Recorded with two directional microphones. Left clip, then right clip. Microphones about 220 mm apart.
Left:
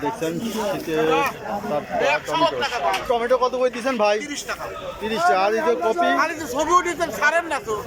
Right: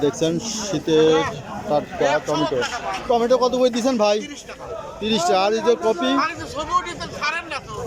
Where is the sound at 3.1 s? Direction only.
15° right (ahead or behind).